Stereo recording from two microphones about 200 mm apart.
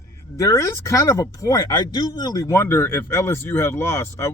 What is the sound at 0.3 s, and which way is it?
Speech, 15° left (ahead or behind).